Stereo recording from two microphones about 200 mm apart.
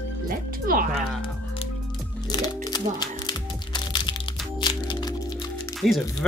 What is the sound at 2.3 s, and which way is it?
Music, 20° left (ahead or behind).